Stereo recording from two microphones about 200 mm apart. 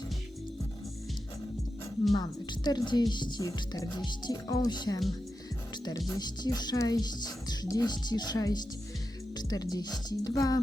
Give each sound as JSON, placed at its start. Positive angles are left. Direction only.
{"t": 2.1, "sound": "speech", "side_deg": 20}
{"t": 6.1, "sound": "speech", "side_deg": 20}